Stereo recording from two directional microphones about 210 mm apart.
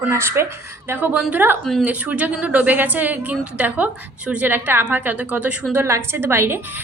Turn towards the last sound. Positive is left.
turn(degrees=-10)  # may be behind; listen again after turning